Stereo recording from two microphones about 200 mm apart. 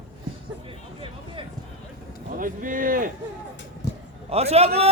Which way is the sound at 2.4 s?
45° right (ahead or behind).